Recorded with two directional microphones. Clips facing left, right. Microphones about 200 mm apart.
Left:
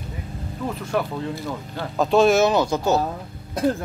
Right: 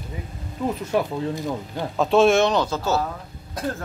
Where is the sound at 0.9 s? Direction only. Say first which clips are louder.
Even; 15° right (ahead or behind).